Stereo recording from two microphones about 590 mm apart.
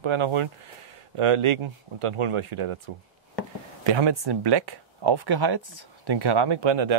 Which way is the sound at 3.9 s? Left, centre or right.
Right.